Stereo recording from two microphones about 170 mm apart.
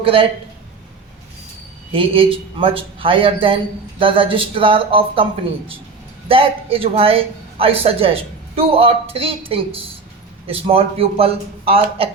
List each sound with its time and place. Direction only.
0.0 s speech: 30° right (ahead or behind)
1.9 s speech: 30° right (ahead or behind)